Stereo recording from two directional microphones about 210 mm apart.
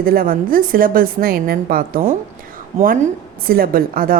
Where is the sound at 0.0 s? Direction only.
45° right (ahead or behind).